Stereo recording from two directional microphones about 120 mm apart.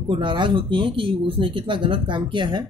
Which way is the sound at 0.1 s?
40° right (ahead or behind).